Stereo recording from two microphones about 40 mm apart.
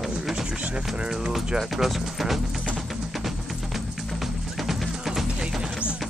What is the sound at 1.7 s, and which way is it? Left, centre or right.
Speech, centre.